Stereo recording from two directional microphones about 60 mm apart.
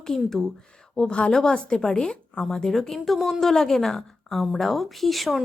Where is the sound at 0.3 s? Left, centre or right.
Centre.